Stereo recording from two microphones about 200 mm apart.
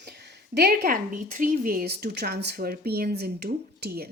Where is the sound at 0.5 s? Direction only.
50° right (ahead or behind).